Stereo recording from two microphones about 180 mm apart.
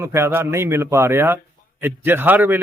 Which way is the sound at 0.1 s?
15° right (ahead or behind).